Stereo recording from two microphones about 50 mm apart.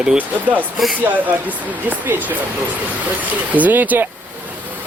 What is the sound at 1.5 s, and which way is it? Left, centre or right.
Speech, right.